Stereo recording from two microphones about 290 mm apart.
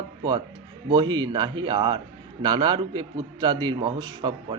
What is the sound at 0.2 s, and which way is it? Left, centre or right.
A man's voice, centre.